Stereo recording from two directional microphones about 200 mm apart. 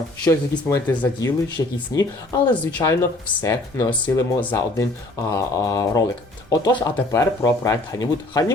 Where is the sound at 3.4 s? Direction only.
10° left (ahead or behind).